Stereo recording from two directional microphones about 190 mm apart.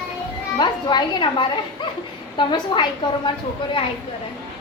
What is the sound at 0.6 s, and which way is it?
A woman's voice, 25° left (ahead or behind).